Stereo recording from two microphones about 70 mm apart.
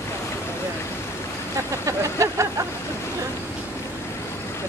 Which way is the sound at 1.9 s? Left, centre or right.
Right.